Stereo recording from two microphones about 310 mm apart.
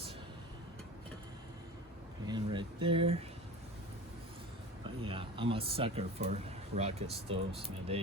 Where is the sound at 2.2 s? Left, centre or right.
Centre.